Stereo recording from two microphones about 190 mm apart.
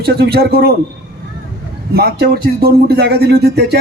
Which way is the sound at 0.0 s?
55° right (ahead or behind).